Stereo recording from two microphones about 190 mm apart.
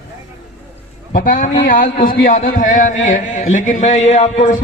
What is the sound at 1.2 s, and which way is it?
A man's voice, 45° left (ahead or behind).